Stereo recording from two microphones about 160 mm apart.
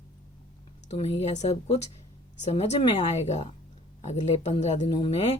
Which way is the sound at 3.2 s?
45° left (ahead or behind).